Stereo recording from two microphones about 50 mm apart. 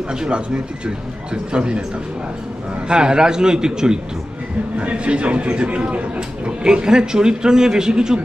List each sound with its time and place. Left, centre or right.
0.1 s a man's voice: centre
2.9 s a man's voice: centre